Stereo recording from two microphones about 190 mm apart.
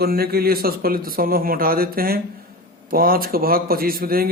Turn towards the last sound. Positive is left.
turn(degrees=-50)  # may be behind; listen again after turning